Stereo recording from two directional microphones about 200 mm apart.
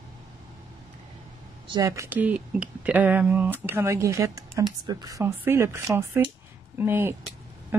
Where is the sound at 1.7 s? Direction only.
15° right (ahead or behind).